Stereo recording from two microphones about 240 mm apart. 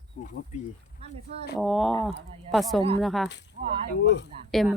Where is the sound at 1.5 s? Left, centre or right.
Centre.